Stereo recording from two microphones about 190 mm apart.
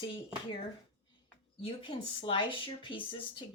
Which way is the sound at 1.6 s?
25° left (ahead or behind).